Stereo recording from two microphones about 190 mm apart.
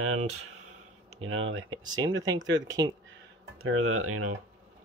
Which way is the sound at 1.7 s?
20° right (ahead or behind).